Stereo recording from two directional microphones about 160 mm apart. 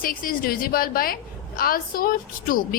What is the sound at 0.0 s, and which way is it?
A woman's voice, 60° left (ahead or behind).